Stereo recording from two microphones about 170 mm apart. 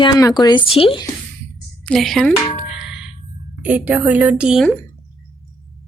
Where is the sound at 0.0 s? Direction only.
20° left (ahead or behind).